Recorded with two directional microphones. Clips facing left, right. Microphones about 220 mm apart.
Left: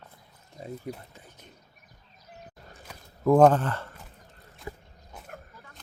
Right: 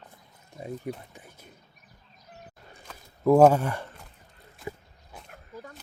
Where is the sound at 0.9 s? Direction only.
20° right (ahead or behind).